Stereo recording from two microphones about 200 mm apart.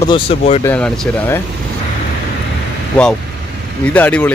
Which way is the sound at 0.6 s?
5° left (ahead or behind).